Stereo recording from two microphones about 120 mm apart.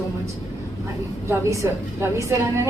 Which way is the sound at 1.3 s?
25° right (ahead or behind).